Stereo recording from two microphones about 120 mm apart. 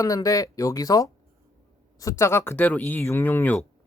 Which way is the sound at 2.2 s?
20° left (ahead or behind).